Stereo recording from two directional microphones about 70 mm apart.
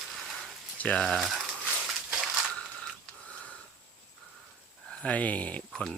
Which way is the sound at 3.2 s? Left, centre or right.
Centre.